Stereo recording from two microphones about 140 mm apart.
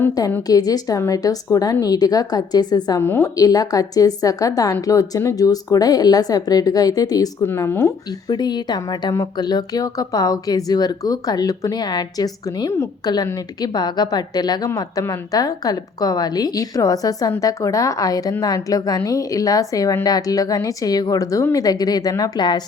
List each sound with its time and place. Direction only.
0.1 s a woman's voice: 25° left (ahead or behind)
3.0 s a woman's voice: 20° left (ahead or behind)